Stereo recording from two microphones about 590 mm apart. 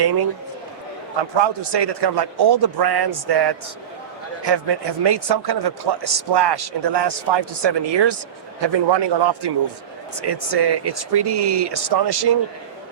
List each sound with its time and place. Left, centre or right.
0.0 s speech: right
1.4 s a man's voice: right